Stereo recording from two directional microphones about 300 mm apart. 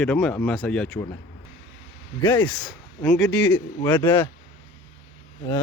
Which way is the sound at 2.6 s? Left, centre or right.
Centre.